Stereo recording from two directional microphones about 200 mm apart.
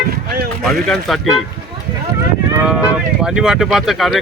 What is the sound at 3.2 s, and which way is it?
Speech, 5° right (ahead or behind).